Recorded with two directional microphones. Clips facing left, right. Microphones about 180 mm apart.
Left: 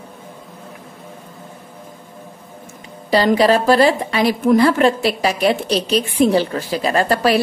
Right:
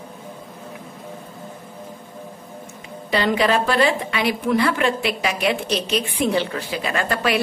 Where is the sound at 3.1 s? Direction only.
35° left (ahead or behind).